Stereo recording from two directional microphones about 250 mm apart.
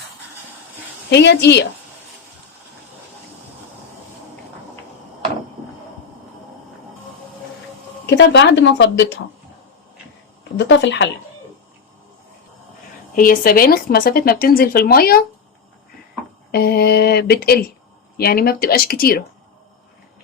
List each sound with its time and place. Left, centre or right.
1.1 s speech: left
8.0 s speech: left
10.6 s speech: left
13.1 s speech: left
16.5 s speech: left